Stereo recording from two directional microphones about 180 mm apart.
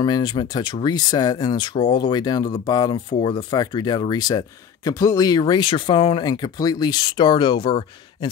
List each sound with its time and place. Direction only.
0.0 s speech: 25° left (ahead or behind)